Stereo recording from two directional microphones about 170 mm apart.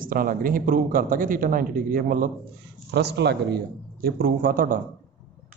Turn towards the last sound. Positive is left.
turn(degrees=-55)  # may be behind; listen again after turning